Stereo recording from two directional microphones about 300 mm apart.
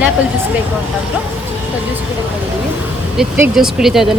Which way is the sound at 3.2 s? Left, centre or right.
Centre.